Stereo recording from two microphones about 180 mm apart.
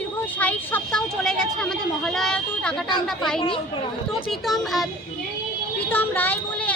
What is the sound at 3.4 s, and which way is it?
Speech, 30° left (ahead or behind).